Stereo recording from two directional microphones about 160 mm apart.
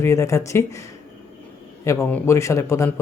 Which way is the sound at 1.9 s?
20° left (ahead or behind).